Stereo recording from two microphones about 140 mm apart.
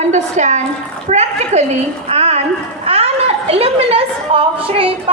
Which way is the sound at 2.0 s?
50° right (ahead or behind).